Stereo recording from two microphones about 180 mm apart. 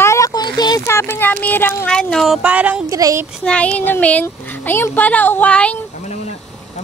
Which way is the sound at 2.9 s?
20° right (ahead or behind).